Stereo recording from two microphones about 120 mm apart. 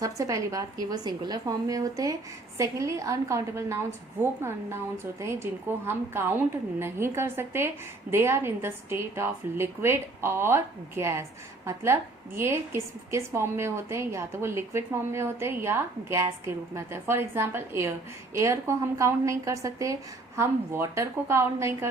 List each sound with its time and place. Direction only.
0.0 s a woman's voice: 25° right (ahead or behind)